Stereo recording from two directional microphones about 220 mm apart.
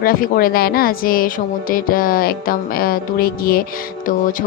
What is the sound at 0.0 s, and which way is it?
A woman's voice, 40° left (ahead or behind).